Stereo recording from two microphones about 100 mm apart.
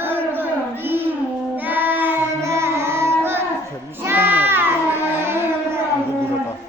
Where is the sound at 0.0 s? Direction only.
20° right (ahead or behind).